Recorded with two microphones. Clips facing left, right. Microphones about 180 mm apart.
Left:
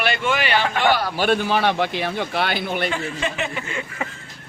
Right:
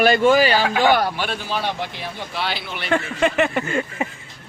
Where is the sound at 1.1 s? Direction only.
50° left (ahead or behind).